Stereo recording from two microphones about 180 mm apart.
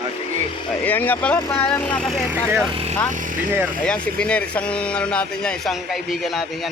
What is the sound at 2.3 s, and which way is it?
Speech, 10° right (ahead or behind).